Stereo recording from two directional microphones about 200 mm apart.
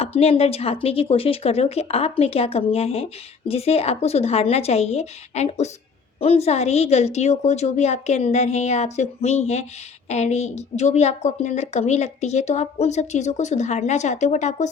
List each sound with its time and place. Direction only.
0.0 s a woman's voice: 30° left (ahead or behind)